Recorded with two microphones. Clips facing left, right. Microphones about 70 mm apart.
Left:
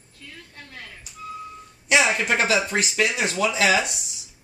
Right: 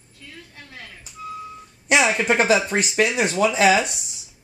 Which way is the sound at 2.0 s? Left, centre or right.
Centre.